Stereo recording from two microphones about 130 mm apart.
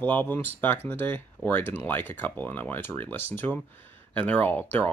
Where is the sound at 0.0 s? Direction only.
15° left (ahead or behind).